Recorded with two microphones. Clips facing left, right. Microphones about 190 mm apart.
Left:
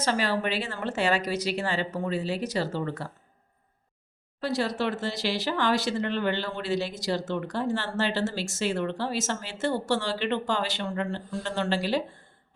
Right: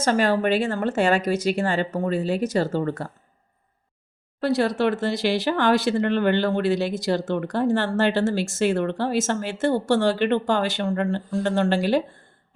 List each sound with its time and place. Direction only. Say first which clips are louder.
0.0 s speech: right 6 dB; 50° right (ahead or behind)
4.4 s speech: right 6 dB; 55° right (ahead or behind)